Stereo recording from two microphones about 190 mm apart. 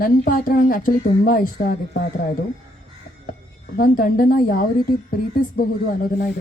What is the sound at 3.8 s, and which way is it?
Speech, 50° left (ahead or behind).